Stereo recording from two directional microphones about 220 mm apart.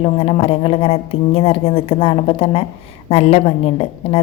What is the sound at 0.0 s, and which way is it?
A woman's voice, 25° left (ahead or behind).